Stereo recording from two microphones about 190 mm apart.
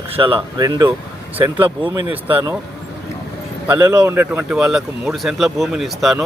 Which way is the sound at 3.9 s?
10° right (ahead or behind).